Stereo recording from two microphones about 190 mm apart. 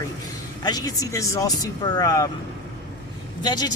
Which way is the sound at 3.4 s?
20° left (ahead or behind).